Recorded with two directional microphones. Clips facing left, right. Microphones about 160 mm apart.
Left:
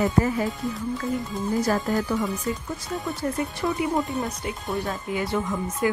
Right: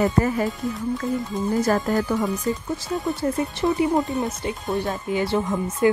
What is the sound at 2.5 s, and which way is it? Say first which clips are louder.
Speech: right 4 dB; 35° right (ahead or behind).